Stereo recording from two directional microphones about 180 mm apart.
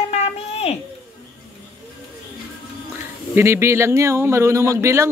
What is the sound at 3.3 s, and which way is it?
Speech, 15° right (ahead or behind).